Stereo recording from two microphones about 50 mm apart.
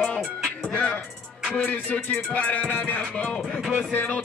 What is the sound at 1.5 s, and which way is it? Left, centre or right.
Music, left.